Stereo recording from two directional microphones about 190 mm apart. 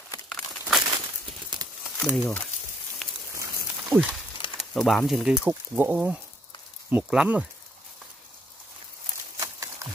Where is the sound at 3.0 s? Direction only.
5° left (ahead or behind).